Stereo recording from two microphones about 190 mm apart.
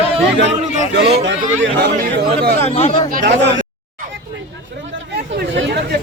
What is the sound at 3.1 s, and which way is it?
Speech, 45° right (ahead or behind).